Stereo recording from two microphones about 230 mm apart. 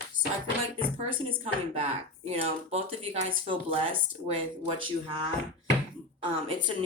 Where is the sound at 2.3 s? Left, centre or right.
Right.